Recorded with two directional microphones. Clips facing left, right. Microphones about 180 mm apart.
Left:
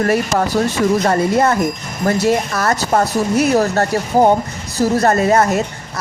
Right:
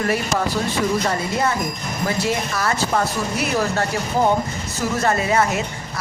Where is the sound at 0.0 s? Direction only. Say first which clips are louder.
Left 5 dB; 45° left (ahead or behind).